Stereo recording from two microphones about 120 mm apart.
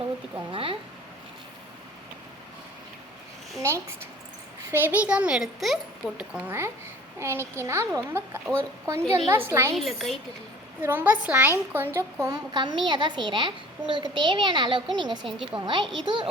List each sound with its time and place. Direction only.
0.5 s speech: 50° right (ahead or behind)
3.6 s a child's voice: 25° right (ahead or behind)
9.7 s a woman's voice: centre (ahead or behind)
10.8 s a child's voice: 15° right (ahead or behind)
12.3 s a woman's voice: 40° right (ahead or behind)